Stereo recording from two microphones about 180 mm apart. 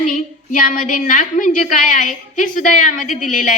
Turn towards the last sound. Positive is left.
turn(degrees=45)  # may be behind; listen again after turning